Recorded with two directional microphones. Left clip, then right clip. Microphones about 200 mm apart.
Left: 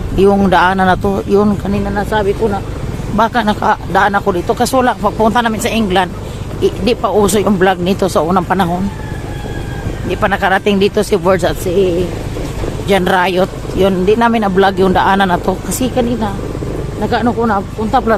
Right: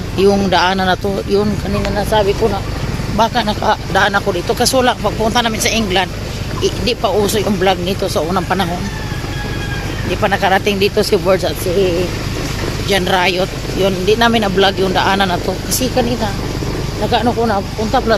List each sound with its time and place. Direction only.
0.2 s speech: 40° left (ahead or behind)
10.1 s speech: 50° left (ahead or behind)
12.9 s speech: 45° left (ahead or behind)